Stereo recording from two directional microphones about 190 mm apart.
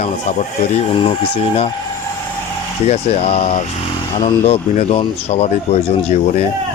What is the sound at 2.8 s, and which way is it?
Speech, 35° left (ahead or behind).